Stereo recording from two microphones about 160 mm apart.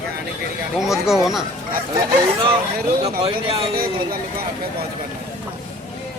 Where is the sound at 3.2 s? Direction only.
35° right (ahead or behind).